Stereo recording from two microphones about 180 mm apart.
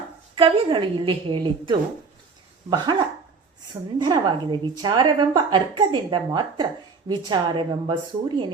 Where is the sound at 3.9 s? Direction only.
25° right (ahead or behind).